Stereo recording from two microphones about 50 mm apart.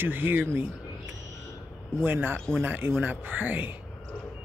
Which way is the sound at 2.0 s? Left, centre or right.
Right.